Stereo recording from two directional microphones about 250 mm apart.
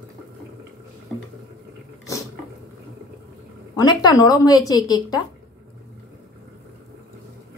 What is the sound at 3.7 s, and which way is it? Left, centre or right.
A woman's voice, centre.